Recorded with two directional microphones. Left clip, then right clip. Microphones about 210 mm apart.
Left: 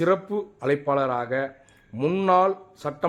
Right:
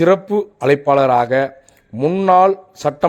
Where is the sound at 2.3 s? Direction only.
35° right (ahead or behind).